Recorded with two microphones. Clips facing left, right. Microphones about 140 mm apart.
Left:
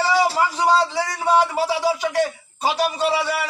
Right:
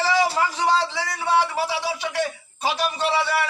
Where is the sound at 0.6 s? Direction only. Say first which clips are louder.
Left 3 dB; 40° left (ahead or behind).